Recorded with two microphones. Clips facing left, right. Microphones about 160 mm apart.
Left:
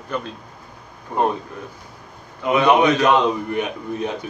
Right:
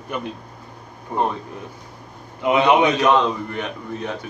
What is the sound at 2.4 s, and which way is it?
Speech, 20° right (ahead or behind).